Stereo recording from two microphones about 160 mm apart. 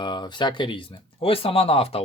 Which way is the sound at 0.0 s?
30° left (ahead or behind).